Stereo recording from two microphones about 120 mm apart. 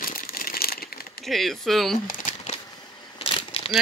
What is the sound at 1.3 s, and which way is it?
Speech, centre (ahead or behind).